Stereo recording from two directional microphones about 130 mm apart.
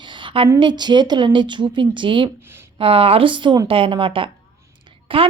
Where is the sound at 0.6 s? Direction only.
35° right (ahead or behind).